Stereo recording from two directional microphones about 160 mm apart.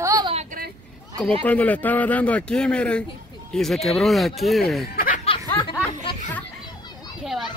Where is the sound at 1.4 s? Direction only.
10° left (ahead or behind).